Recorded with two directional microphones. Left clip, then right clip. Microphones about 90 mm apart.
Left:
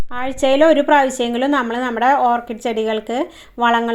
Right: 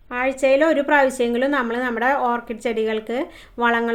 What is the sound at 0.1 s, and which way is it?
A woman's voice, 25° left (ahead or behind).